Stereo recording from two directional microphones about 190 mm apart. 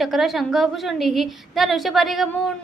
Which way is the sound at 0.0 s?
Centre (ahead or behind).